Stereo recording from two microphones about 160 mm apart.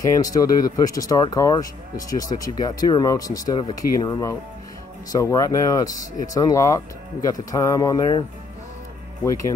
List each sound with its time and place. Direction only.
0.1 s speech: 20° left (ahead or behind)